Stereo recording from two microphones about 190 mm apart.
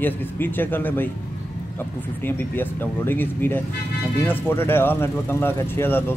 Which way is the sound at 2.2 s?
10° left (ahead or behind).